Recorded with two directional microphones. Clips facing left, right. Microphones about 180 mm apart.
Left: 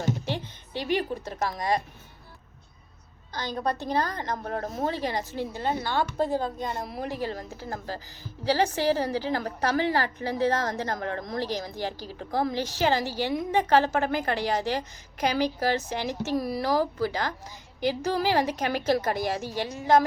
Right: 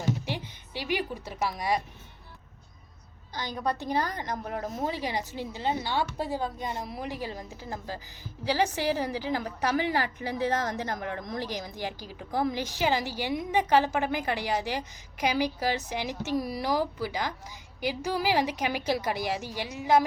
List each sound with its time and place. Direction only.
0.3 s a woman's voice: 10° right (ahead or behind)
3.8 s a woman's voice: 15° right (ahead or behind)
5.5 s speech: 50° left (ahead or behind)
5.9 s a woman's voice: 10° right (ahead or behind)